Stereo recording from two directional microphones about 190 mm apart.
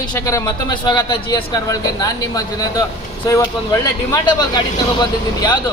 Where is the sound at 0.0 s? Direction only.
20° left (ahead or behind).